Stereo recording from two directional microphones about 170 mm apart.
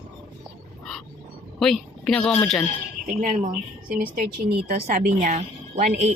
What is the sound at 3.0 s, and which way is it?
A woman's voice, 50° right (ahead or behind).